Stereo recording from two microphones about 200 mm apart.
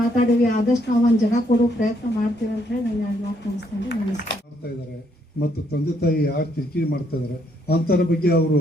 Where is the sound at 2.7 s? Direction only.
60° left (ahead or behind).